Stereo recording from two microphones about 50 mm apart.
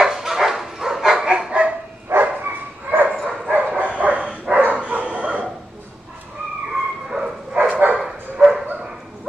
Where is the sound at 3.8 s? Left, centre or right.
Right.